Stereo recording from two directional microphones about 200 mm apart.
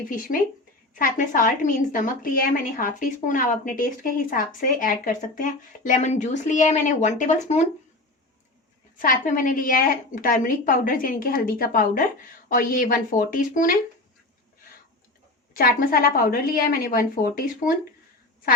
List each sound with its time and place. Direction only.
0.1 s a woman's voice: 45° left (ahead or behind)
9.0 s a woman's voice: 40° left (ahead or behind)
15.5 s a woman's voice: 45° left (ahead or behind)